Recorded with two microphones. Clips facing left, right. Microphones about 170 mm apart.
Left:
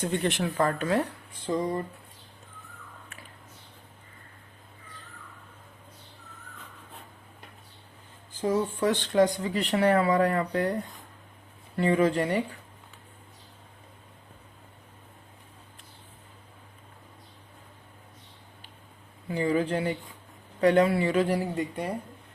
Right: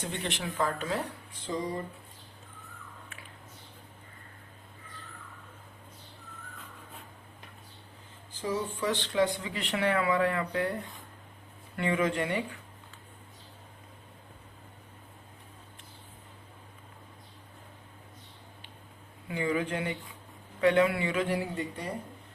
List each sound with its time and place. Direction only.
0.1 s speech: 50° left (ahead or behind)
8.3 s speech: 50° left (ahead or behind)
11.8 s speech: 35° left (ahead or behind)
19.3 s speech: 35° left (ahead or behind)